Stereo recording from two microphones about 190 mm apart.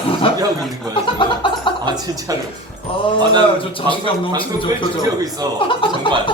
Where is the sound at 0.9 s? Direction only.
25° left (ahead or behind).